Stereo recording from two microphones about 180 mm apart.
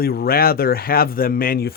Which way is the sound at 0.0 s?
55° left (ahead or behind).